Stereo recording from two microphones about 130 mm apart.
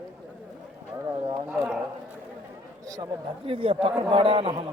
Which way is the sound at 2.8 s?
30° right (ahead or behind).